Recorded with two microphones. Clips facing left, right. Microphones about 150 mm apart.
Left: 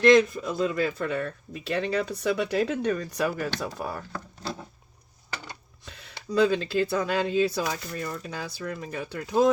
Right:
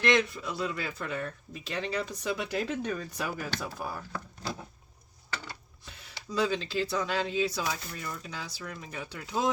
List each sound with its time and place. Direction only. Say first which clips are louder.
0.0 s speech: left 8 dB; 35° left (ahead or behind); by 4.0 s 65° left (ahead or behind)
5.8 s speech: left 4 dB; 60° left (ahead or behind)